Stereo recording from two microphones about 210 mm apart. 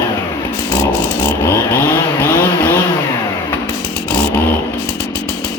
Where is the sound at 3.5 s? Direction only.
10° left (ahead or behind).